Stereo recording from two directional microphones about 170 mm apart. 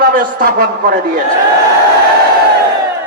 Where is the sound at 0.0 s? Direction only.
55° right (ahead or behind).